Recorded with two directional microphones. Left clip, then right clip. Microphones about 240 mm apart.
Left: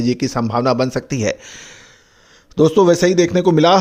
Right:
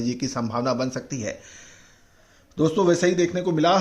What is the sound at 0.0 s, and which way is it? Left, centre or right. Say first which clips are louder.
A man's voice: left 8 dB; left.